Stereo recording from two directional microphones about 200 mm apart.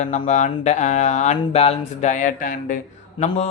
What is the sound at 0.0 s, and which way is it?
A man's voice, 35° left (ahead or behind).